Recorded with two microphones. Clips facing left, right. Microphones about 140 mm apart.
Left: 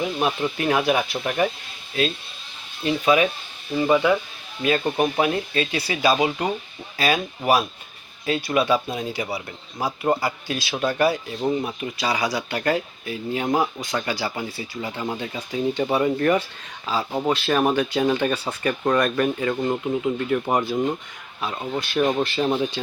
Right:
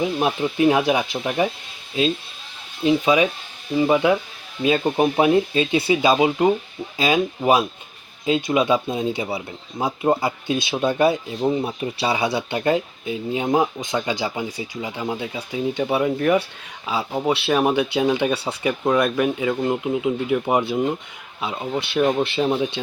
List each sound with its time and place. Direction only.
0.0 s speech: 20° right (ahead or behind)
2.8 s speech: 20° right (ahead or behind)